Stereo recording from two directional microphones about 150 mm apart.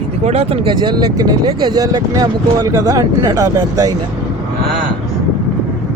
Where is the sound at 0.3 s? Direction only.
45° right (ahead or behind); by 3.9 s 20° right (ahead or behind).